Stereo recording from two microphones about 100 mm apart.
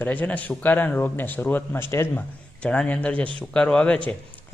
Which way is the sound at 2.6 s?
10° left (ahead or behind).